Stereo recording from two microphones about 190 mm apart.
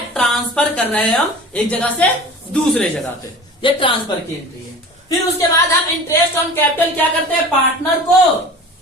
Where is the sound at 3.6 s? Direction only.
25° left (ahead or behind).